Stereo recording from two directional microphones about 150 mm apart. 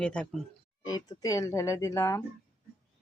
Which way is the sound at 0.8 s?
25° left (ahead or behind).